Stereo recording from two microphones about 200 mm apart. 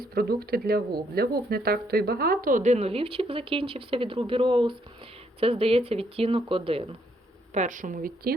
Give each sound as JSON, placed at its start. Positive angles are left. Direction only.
{"t": 0.0, "sound": "a woman's voice", "side_deg": -50}
{"t": 7.5, "sound": "speech", "side_deg": -40}